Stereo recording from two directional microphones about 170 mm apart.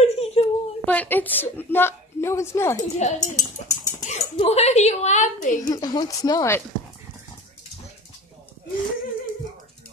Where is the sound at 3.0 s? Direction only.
45° left (ahead or behind).